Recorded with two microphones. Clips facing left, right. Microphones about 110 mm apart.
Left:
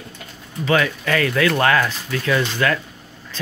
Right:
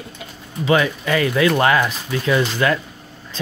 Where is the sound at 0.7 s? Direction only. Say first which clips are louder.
Right 2 dB; 15° right (ahead or behind).